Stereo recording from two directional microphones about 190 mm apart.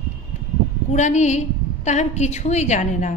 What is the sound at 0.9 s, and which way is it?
A woman's voice, 40° left (ahead or behind).